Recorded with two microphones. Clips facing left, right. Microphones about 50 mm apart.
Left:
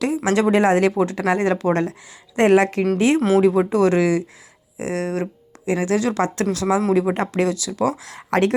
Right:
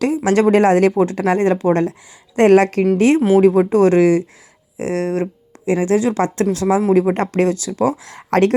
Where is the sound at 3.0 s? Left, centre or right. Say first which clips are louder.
Right 4 dB; right.